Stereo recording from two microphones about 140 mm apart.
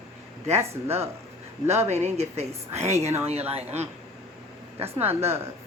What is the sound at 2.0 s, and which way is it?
A woman's voice, 50° right (ahead or behind).